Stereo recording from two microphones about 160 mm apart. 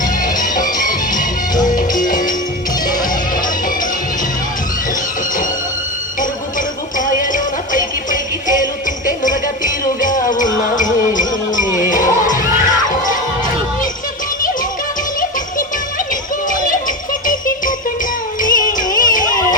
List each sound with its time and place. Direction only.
0.0 s music: 55° left (ahead or behind)
7.0 s music: 55° left (ahead or behind)
17.2 s music: 55° left (ahead or behind)